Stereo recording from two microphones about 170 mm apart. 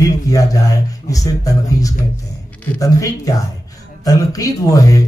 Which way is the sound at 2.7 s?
20° left (ahead or behind).